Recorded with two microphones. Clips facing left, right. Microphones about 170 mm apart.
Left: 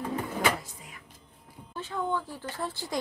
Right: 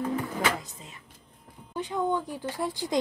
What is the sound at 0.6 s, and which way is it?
Drawer open or close, 20° right (ahead or behind).